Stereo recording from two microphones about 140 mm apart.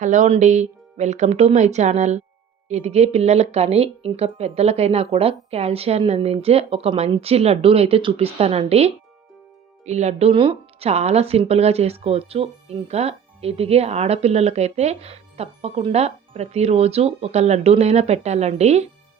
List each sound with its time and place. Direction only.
0.0 s speech: 60° right (ahead or behind)